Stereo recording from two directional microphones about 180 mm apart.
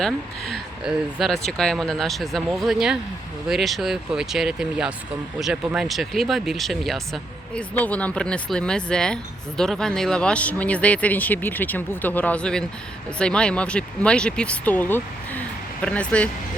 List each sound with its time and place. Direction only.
0.0 s speech: 5° left (ahead or behind)